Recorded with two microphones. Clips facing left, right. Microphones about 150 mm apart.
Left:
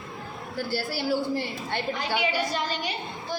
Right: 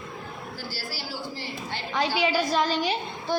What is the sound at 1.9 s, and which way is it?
A woman's voice, 90° right.